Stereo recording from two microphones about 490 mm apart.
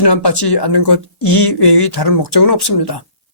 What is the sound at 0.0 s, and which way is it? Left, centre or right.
Speech, left.